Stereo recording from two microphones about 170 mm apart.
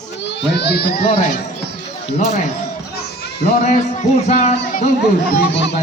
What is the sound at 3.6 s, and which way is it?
A child's voice, 45° left (ahead or behind).